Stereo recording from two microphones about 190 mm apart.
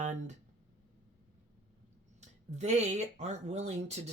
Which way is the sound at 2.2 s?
35° right (ahead or behind).